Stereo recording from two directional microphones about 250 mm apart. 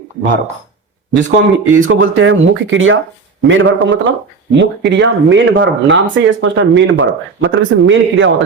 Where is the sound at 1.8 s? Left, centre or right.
Right.